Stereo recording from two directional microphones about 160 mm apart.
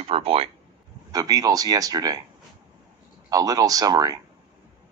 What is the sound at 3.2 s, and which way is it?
Speech, 25° right (ahead or behind).